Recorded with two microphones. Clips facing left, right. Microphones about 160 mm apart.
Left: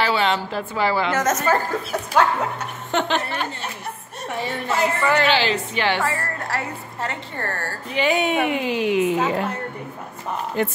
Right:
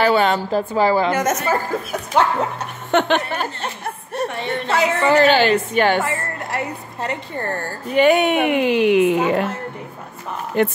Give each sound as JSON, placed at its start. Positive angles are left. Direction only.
{"t": 0.0, "sound": "a woman's voice", "side_deg": -45}
{"t": 1.1, "sound": "a woman's voice", "side_deg": -15}
{"t": 2.9, "sound": "speech", "side_deg": -60}
{"t": 4.6, "sound": "a woman's voice", "side_deg": -75}
{"t": 5.2, "sound": "a woman's voice", "side_deg": -50}
{"t": 6.0, "sound": "a woman's voice", "side_deg": -20}
{"t": 7.9, "sound": "a woman's voice", "side_deg": -55}
{"t": 10.6, "sound": "a woman's voice", "side_deg": -65}